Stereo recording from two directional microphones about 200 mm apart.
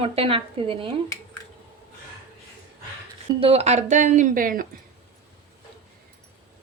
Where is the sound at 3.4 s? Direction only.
30° right (ahead or behind).